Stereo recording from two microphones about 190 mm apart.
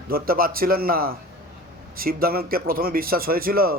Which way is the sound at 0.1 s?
50° right (ahead or behind).